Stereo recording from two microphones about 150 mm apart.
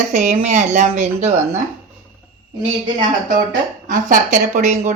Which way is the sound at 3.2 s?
60° right (ahead or behind).